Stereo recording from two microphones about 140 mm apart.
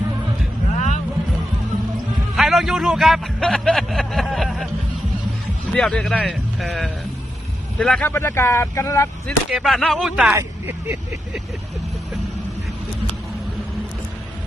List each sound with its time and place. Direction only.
0.7 s vehicle: 55° left (ahead or behind)
2.3 s a man's voice: centre (ahead or behind)
5.7 s speech: 5° left (ahead or behind)
8.1 s speech: 15° left (ahead or behind)
9.5 s speech: centre (ahead or behind)
10.3 s speech: 15° right (ahead or behind)